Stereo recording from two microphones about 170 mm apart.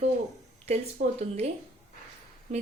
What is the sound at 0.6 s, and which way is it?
Speech, 40° right (ahead or behind).